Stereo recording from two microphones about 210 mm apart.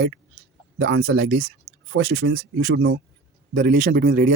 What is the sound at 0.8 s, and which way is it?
Speech, 60° right (ahead or behind).